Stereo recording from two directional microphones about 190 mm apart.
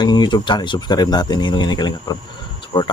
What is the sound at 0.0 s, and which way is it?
Speech, 20° left (ahead or behind).